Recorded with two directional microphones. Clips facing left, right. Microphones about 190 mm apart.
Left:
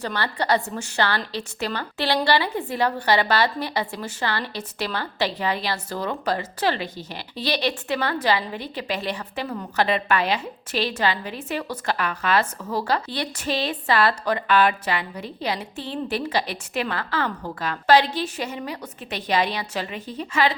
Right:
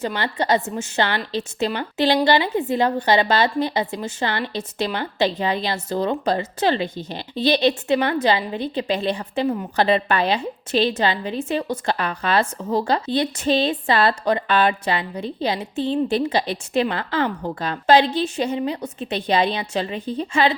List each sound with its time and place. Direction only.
0.0 s a woman's voice: 20° right (ahead or behind)